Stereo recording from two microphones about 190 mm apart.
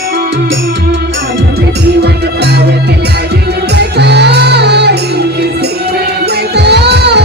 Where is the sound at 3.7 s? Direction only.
60° right (ahead or behind).